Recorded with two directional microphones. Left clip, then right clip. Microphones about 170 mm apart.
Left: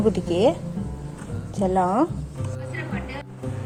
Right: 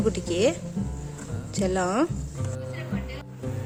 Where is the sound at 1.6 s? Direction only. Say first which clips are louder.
Left 4 dB; 20° right (ahead or behind).